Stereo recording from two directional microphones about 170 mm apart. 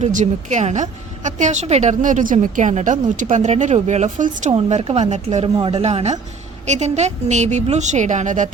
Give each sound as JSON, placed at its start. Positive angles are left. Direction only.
{"t": 0.0, "sound": "a woman's voice", "side_deg": -45}